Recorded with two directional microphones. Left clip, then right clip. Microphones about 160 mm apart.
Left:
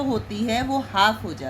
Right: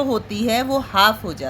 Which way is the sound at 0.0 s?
40° right (ahead or behind).